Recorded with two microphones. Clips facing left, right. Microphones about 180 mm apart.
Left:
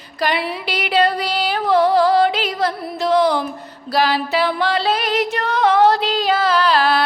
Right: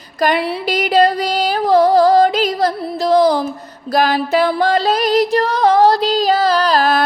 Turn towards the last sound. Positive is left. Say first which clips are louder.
# right 2 dB
turn(degrees=-45)  # may be behind; listen again after turning